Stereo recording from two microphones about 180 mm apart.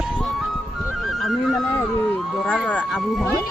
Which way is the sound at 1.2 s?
Centre (ahead or behind).